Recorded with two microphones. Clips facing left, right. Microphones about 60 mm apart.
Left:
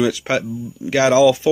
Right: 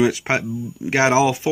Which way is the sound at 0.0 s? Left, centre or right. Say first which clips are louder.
Even; right.